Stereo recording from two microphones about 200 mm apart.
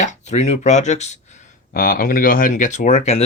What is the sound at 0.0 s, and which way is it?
Speech, 35° left (ahead or behind).